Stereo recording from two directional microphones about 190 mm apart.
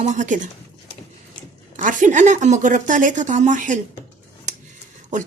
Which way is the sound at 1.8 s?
40° right (ahead or behind).